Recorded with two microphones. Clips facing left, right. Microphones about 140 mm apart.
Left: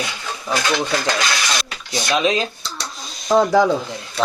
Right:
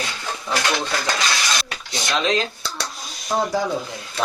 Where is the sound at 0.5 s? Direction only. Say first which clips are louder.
Left 2 dB; 10° left (ahead or behind).